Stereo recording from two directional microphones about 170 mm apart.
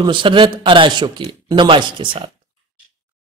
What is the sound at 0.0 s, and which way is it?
Speech, 30° right (ahead or behind).